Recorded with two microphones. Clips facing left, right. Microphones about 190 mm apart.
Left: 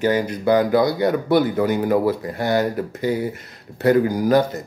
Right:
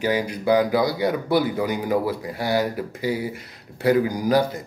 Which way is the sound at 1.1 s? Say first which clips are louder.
Left 4 dB; 5° right (ahead or behind).